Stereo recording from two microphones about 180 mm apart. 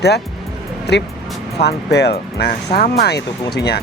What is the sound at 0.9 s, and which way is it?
Speech, 65° left (ahead or behind).